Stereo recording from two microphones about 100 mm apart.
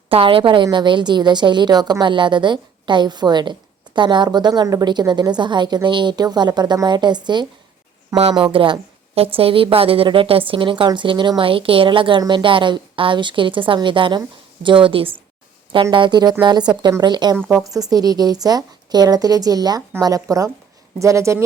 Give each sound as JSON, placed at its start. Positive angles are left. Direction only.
{"t": 0.1, "sound": "a woman's voice", "side_deg": -65}